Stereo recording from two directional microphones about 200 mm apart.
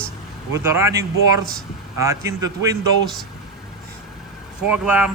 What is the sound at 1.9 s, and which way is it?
Speech, 15° right (ahead or behind).